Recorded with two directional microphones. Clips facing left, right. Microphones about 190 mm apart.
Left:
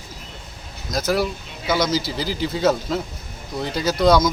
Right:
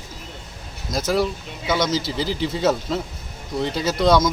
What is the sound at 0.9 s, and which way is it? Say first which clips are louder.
Speech: even; centre (ahead or behind).